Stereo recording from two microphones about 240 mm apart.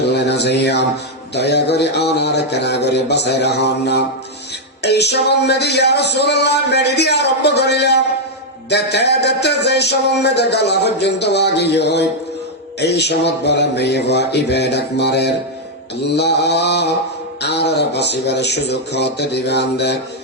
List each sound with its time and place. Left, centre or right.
0.0 s speech: left